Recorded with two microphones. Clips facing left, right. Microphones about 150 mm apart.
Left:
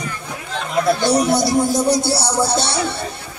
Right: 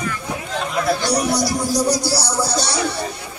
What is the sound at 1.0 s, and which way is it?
Speech, 25° left (ahead or behind).